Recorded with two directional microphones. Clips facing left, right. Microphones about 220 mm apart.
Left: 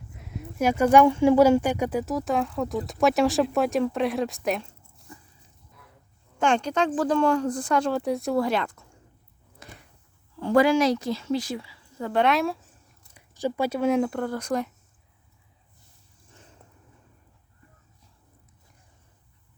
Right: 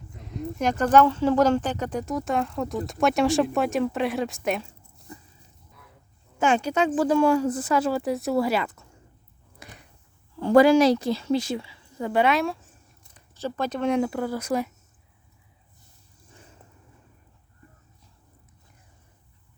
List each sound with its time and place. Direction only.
0.1 s speech: 5° left (ahead or behind)
6.4 s speech: 5° right (ahead or behind)
9.6 s a sound: 10° right (ahead or behind)
10.4 s a woman's voice: 40° right (ahead or behind); by 12.2 s 15° right (ahead or behind)
12.2 s speech: centre (ahead or behind)
13.1 s speech: 10° left (ahead or behind); by 14.7 s 5° right (ahead or behind)